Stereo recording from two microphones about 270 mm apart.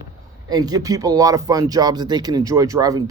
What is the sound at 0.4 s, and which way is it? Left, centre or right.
Speech, centre.